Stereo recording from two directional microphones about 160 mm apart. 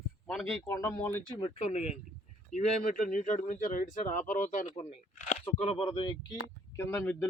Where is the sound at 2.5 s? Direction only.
55° left (ahead or behind); by 6.4 s 30° left (ahead or behind).